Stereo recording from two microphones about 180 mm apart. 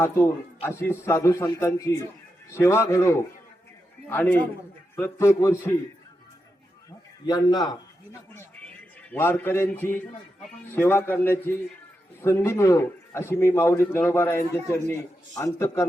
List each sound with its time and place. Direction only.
0.6 s a man's voice: 15° left (ahead or behind)
7.3 s a man's voice: 20° left (ahead or behind)
9.0 s a man's voice: 10° left (ahead or behind)